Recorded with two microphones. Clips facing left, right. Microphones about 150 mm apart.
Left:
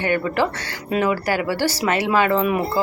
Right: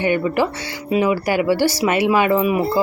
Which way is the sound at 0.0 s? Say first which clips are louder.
Right 2 dB; 15° right (ahead or behind).